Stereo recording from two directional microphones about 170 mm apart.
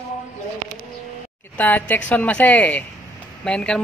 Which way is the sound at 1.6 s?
10° left (ahead or behind).